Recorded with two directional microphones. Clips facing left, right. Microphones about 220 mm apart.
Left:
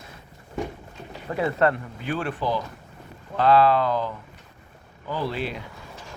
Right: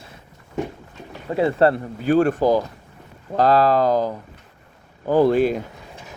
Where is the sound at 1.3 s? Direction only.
25° right (ahead or behind); by 5.6 s 45° right (ahead or behind).